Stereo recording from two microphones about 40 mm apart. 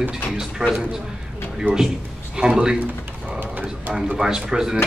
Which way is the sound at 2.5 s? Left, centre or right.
Centre.